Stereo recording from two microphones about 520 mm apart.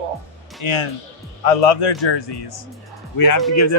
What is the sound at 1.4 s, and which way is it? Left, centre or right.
A man's voice, left.